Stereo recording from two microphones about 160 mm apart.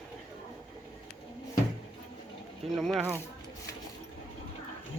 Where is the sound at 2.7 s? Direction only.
Centre (ahead or behind).